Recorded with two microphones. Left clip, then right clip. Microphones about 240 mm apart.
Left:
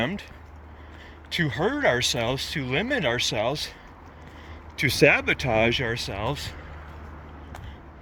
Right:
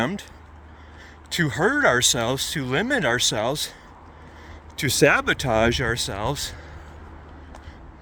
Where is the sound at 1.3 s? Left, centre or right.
Right.